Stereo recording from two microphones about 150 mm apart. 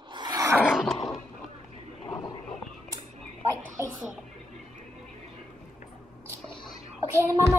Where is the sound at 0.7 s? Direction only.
Centre (ahead or behind).